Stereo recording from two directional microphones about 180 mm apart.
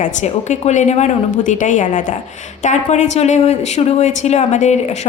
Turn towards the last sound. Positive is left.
turn(degrees=40)  # may be behind; listen again after turning